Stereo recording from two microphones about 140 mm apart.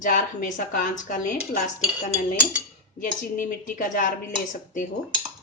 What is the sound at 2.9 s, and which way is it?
Speech, 70° left (ahead or behind).